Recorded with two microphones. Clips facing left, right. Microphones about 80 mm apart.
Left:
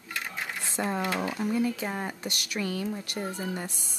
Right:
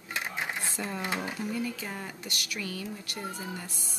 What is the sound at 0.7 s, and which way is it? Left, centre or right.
A woman's voice, left.